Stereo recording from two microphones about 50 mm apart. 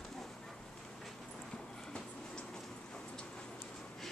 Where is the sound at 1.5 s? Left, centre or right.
Centre.